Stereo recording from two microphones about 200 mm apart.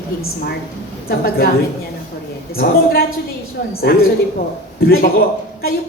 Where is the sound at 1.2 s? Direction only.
50° left (ahead or behind).